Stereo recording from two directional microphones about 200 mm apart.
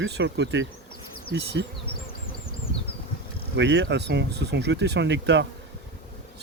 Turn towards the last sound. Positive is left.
turn(degrees=-60)  # may be behind; listen again after turning